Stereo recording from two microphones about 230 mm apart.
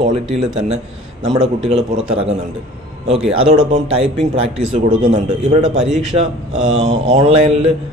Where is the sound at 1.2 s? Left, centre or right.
Centre.